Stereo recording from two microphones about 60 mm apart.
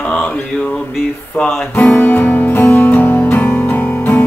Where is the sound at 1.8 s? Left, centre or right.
Left.